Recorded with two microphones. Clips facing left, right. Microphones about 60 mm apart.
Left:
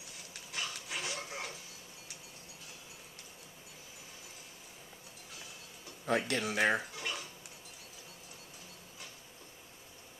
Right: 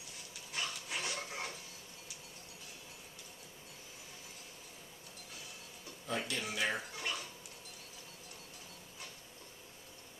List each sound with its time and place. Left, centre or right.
0.5 s dog: centre
6.0 s speech: left
7.0 s a sound: centre